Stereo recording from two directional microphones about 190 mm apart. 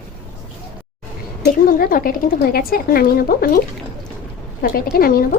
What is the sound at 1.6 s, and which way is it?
A woman's voice, 50° left (ahead or behind).